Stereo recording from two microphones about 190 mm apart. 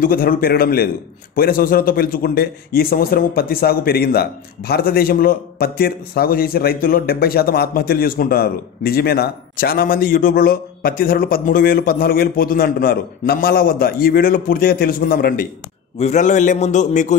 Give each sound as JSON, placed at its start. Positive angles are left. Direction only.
{"t": 0.0, "sound": "a man's voice", "side_deg": 50}
{"t": 16.0, "sound": "a man's voice", "side_deg": 40}